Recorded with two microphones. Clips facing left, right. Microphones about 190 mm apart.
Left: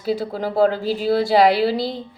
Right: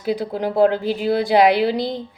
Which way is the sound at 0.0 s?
15° right (ahead or behind).